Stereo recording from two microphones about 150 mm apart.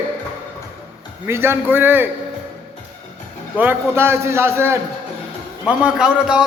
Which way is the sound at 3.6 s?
15° right (ahead or behind).